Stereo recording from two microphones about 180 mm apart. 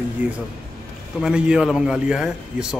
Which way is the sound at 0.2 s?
10° right (ahead or behind).